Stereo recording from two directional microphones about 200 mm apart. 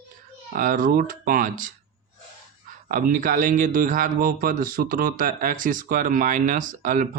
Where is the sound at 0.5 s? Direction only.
45° right (ahead or behind).